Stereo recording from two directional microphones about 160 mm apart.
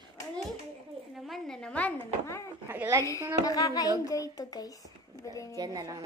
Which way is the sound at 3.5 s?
20° left (ahead or behind).